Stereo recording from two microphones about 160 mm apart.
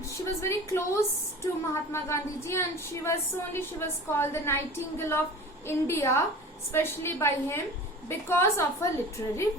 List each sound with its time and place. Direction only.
0.4 s a woman's voice: 15° left (ahead or behind)